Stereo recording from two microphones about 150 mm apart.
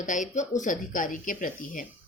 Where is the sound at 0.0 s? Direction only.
55° left (ahead or behind).